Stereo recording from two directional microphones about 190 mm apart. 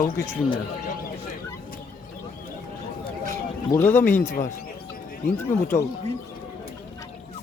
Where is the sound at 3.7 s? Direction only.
10° left (ahead or behind).